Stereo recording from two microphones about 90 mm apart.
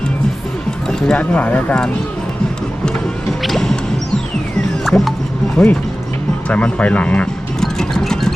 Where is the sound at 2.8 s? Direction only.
5° left (ahead or behind).